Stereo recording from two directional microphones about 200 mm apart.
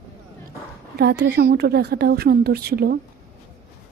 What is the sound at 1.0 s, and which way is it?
A woman's voice, 55° right (ahead or behind).